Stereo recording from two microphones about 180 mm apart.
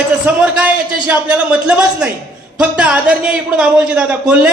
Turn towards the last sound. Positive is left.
turn(degrees=-5)  # may be behind; listen again after turning